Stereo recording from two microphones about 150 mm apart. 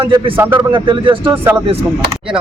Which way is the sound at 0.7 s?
35° right (ahead or behind).